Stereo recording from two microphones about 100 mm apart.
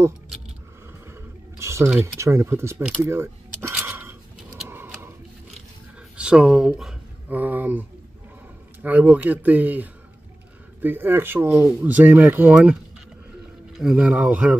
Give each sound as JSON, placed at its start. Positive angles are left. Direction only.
{"t": 1.0, "sound": "a sound", "side_deg": -25}
{"t": 2.1, "sound": "speech", "side_deg": -30}
{"t": 3.8, "sound": "a sound", "side_deg": -20}
{"t": 6.1, "sound": "speech", "side_deg": -10}
{"t": 7.2, "sound": "speech", "side_deg": -15}
{"t": 8.8, "sound": "speech", "side_deg": -15}
{"t": 13.7, "sound": "speech", "side_deg": -5}